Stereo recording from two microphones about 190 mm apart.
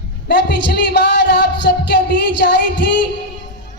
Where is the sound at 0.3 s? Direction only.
65° left (ahead or behind).